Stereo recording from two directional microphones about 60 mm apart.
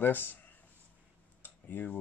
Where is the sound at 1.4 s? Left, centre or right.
Left.